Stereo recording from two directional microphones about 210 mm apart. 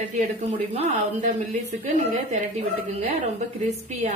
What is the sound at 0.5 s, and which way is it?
A woman's voice, 30° right (ahead or behind).